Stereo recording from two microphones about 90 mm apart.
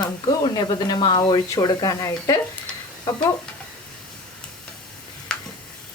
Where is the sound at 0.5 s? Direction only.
50° left (ahead or behind).